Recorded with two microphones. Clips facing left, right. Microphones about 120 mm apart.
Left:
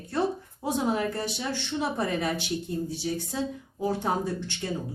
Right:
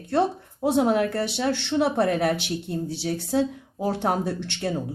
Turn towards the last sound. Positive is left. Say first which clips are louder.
# right 4 dB
turn(degrees=-70)  # may be behind; listen again after turning